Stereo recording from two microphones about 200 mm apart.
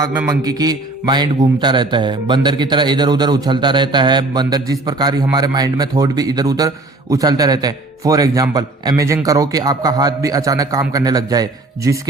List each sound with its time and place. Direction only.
0.3 s a man's voice: 20° right (ahead or behind)